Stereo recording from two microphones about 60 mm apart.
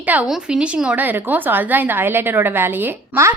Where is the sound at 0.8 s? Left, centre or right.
Right.